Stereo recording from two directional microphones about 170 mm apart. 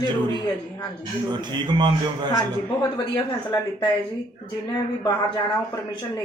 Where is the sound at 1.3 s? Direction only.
25° right (ahead or behind).